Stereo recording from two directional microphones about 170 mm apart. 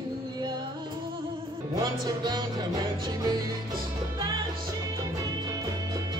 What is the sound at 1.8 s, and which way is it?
Music, 25° right (ahead or behind).